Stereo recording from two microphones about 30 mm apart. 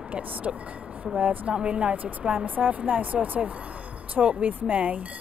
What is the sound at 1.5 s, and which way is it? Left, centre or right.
Speech, right.